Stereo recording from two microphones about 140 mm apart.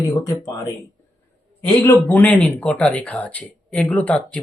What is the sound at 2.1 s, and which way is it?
Speech, 10° left (ahead or behind).